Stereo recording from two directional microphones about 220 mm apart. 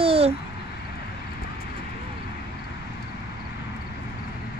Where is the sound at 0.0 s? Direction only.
25° right (ahead or behind).